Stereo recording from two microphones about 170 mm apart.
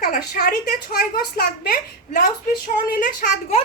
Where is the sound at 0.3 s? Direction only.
65° left (ahead or behind).